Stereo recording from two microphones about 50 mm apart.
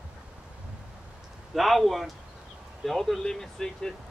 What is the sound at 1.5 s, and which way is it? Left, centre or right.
Speech, centre.